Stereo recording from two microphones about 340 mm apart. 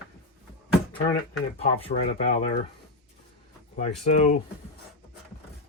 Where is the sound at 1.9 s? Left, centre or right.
Left.